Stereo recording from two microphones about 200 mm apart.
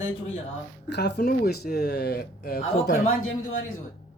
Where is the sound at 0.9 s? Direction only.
55° left (ahead or behind).